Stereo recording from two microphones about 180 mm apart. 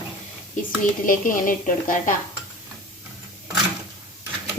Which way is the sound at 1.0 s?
50° left (ahead or behind).